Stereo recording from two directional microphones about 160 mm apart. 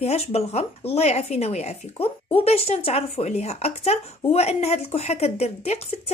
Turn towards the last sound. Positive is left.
turn(degrees=40)  # may be behind; listen again after turning